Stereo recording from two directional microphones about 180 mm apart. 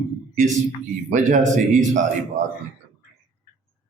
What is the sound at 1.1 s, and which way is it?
Speech, 45° right (ahead or behind).